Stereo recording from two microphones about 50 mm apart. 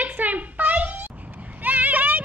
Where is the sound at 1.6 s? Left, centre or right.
Right.